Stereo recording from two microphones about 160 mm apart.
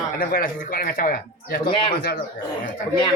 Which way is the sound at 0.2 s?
65° left (ahead or behind).